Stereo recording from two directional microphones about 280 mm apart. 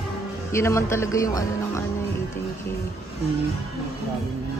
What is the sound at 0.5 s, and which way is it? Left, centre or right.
A woman's voice, centre.